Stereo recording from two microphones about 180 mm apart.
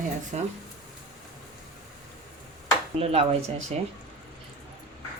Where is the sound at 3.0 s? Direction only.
35° right (ahead or behind).